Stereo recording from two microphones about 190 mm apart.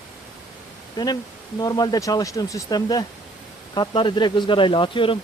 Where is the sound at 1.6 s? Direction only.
20° left (ahead or behind).